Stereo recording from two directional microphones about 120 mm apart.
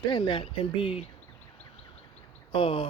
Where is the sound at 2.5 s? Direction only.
50° left (ahead or behind).